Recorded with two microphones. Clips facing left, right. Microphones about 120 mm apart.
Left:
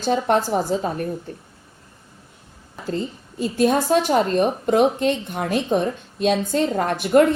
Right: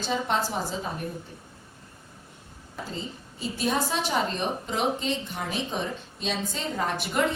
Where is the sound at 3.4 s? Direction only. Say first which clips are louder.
Left 9 dB; 50° left (ahead or behind).